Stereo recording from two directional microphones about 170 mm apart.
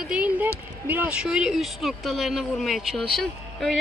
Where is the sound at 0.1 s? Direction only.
10° right (ahead or behind).